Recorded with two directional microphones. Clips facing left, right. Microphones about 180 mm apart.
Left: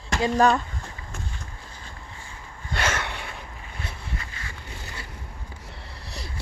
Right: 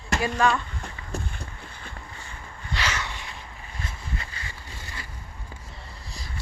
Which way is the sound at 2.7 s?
50° left (ahead or behind).